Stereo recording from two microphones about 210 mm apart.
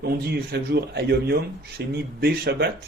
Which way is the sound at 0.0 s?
50° right (ahead or behind).